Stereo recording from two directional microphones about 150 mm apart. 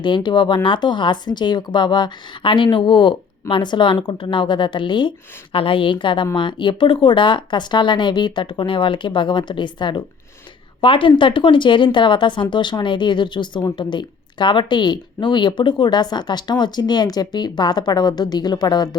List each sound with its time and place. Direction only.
0.0 s speech: 30° left (ahead or behind)